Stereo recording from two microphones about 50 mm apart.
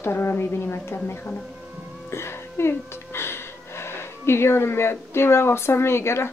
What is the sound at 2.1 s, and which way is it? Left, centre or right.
Music, left.